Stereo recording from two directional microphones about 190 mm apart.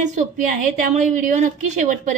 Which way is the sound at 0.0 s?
40° right (ahead or behind).